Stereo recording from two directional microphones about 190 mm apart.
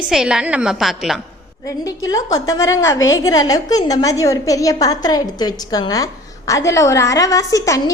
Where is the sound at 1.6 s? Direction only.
20° left (ahead or behind).